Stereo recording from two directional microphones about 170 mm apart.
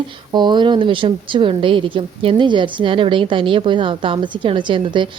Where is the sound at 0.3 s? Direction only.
25° right (ahead or behind).